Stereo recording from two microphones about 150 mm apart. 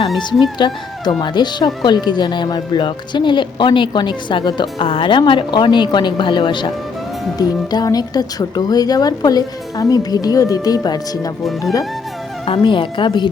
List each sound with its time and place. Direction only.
0.6 s speech: 30° left (ahead or behind)
12.5 s speech: 35° left (ahead or behind)